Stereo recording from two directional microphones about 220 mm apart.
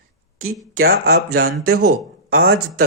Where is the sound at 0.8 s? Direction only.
45° right (ahead or behind).